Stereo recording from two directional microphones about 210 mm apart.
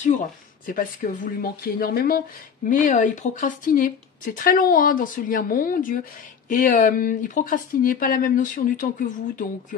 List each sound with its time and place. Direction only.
0.0 s speech: 35° left (ahead or behind)